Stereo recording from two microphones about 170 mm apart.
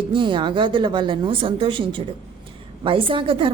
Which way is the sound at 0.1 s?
30° right (ahead or behind).